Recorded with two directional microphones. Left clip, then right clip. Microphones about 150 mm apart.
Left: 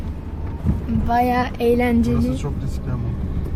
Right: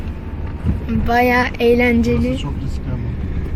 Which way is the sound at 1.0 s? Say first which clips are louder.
Right 4 dB; 5° right (ahead or behind).